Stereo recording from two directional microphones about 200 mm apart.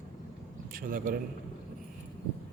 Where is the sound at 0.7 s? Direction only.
45° right (ahead or behind).